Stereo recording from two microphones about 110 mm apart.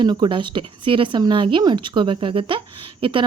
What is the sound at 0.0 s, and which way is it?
Speech, 45° right (ahead or behind).